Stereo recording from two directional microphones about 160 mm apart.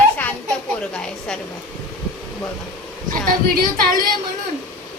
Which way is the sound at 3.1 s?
65° right (ahead or behind).